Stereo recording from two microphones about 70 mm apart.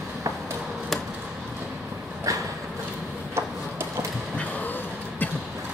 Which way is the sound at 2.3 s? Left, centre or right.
Right.